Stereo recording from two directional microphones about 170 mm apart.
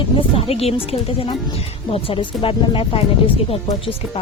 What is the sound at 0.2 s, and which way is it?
Speech, 35° left (ahead or behind).